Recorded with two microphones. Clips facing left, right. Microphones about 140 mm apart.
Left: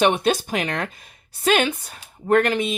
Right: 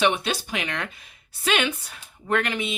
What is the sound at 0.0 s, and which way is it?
Speech, 45° left (ahead or behind).